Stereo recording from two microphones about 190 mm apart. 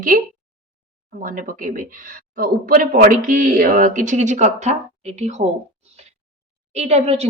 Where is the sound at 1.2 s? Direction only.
45° right (ahead or behind).